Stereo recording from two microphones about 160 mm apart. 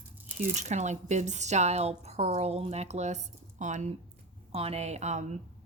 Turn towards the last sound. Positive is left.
turn(degrees=-45)  # may be behind; listen again after turning